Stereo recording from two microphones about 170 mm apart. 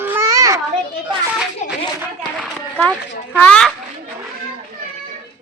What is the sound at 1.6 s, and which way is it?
Speech, 45° left (ahead or behind).